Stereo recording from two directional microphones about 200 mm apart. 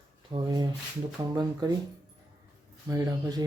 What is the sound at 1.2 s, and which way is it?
Speech, 15° right (ahead or behind).